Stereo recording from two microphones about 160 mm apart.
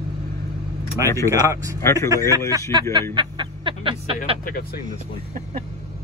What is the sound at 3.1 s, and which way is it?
Speech, 30° right (ahead or behind).